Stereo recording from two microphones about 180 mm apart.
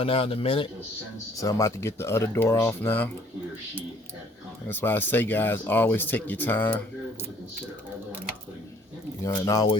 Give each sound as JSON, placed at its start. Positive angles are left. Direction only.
{"t": 0.0, "sound": "a man's voice", "side_deg": 30}
{"t": 1.4, "sound": "speech", "side_deg": 15}
{"t": 4.7, "sound": "speech", "side_deg": 10}
{"t": 9.2, "sound": "speech", "side_deg": 15}